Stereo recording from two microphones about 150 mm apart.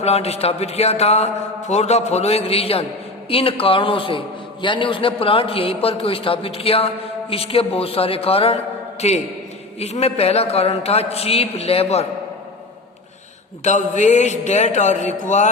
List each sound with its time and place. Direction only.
0.0 s a man's voice: 45° left (ahead or behind)
13.7 s a man's voice: 50° left (ahead or behind)